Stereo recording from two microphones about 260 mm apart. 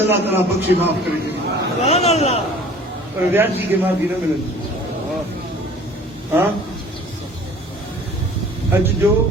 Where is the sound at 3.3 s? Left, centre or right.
Centre.